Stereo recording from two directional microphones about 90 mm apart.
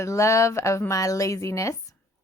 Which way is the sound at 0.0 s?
35° left (ahead or behind).